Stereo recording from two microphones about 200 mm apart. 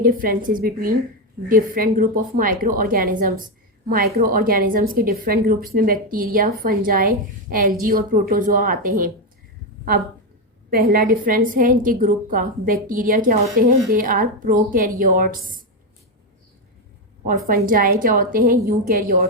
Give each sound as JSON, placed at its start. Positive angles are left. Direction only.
{"t": 0.0, "sound": "a woman's voice", "side_deg": -45}
{"t": 10.7, "sound": "a woman's voice", "side_deg": -50}
{"t": 17.2, "sound": "a woman's voice", "side_deg": -45}